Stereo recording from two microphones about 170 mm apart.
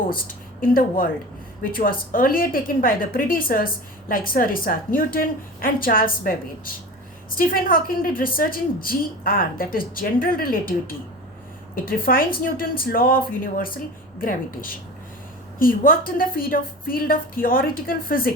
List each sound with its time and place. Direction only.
0.1 s a woman's voice: 55° left (ahead or behind)